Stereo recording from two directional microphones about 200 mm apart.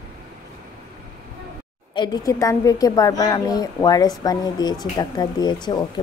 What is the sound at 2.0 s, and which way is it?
A woman's voice, 20° left (ahead or behind).